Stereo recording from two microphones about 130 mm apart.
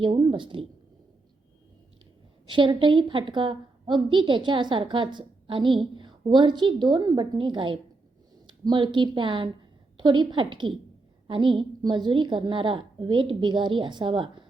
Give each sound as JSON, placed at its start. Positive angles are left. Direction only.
{"t": 0.0, "sound": "a woman's voice", "side_deg": -40}
{"t": 2.5, "sound": "a woman's voice", "side_deg": -40}